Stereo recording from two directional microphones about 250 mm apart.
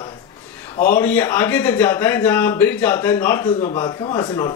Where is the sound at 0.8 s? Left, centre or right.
Centre.